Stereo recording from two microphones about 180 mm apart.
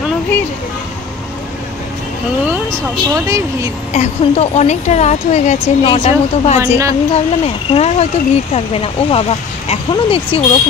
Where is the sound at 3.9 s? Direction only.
40° left (ahead or behind).